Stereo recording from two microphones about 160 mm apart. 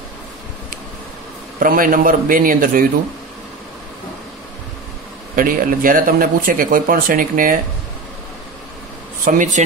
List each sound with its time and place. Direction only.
1.6 s speech: 60° right (ahead or behind)
5.3 s speech: 60° right (ahead or behind)
9.2 s speech: 55° right (ahead or behind)